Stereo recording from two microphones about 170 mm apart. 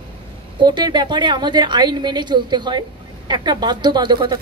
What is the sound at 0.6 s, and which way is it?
A woman's voice, 25° right (ahead or behind).